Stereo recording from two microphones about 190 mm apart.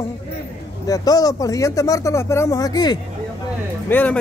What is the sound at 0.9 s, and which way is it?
Speech, 20° left (ahead or behind).